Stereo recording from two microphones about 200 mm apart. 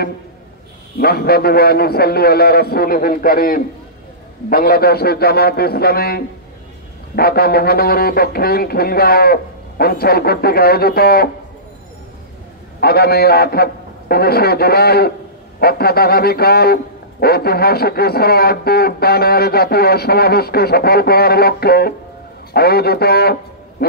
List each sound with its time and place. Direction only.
0.9 s speech: 50° left (ahead or behind)
12.8 s speech: 50° left (ahead or behind)
23.8 s music: 50° left (ahead or behind)